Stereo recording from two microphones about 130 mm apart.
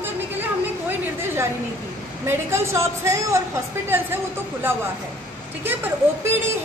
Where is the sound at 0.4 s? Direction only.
15° right (ahead or behind).